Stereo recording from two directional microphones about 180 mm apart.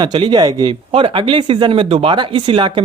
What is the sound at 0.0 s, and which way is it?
Speech, 25° right (ahead or behind).